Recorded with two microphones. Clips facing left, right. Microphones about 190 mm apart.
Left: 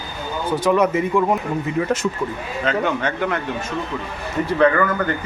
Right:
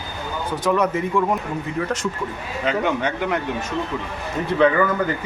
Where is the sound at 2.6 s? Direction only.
15° right (ahead or behind).